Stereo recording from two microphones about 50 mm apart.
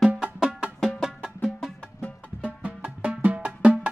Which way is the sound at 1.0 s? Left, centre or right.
Centre.